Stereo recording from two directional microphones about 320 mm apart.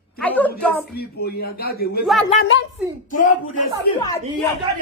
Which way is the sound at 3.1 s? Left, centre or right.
Left.